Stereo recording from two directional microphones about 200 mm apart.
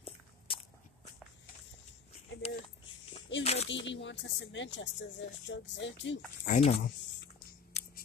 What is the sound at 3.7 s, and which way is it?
Speech, 65° left (ahead or behind).